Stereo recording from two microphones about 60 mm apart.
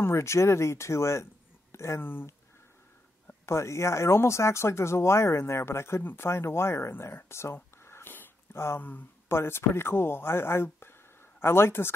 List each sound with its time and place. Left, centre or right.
0.0 s speech: left
1.7 s a sound: left
2.0 s speech: left
3.4 s speech: left
7.8 s a sound: left
9.3 s speech: left